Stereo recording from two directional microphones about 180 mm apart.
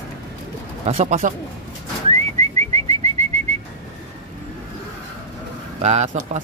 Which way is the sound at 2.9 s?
35° right (ahead or behind).